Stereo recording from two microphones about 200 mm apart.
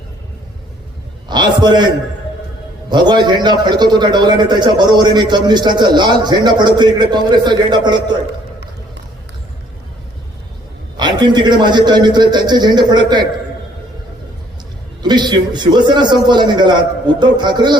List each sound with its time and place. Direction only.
1.3 s a man's voice: 20° right (ahead or behind)
2.9 s a man's voice: 20° right (ahead or behind)
10.9 s a man's voice: 20° right (ahead or behind)
15.0 s a man's voice: 20° right (ahead or behind)